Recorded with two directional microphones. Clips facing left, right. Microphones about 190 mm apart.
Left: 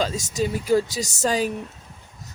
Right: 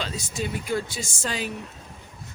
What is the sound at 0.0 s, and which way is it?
Speech, 45° left (ahead or behind).